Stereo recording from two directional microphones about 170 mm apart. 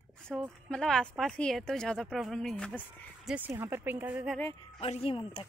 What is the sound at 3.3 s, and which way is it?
Speech, 15° right (ahead or behind).